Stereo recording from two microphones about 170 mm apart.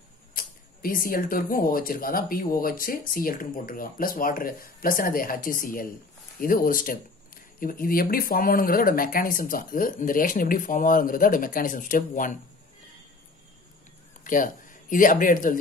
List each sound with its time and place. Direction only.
0.3 s speech: 55° left (ahead or behind)
14.2 s speech: 50° left (ahead or behind)